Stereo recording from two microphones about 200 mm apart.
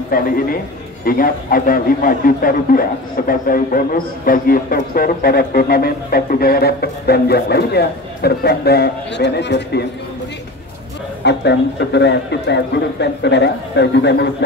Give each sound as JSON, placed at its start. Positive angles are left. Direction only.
{"t": 0.1, "sound": "a man's voice", "side_deg": 45}
{"t": 11.2, "sound": "speech", "side_deg": 60}